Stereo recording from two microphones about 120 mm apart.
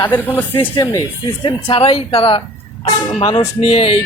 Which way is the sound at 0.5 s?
45° left (ahead or behind).